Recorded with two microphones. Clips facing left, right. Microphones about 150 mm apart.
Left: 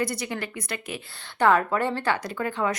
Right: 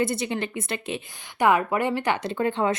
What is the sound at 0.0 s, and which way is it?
Speech, 25° right (ahead or behind).